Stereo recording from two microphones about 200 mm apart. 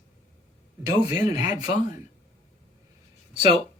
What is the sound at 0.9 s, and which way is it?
Speech, 20° right (ahead or behind).